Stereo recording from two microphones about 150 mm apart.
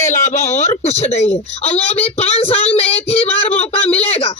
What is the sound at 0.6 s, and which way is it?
Speech, 45° left (ahead or behind).